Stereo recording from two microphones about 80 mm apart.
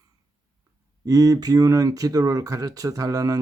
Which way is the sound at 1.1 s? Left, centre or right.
Right.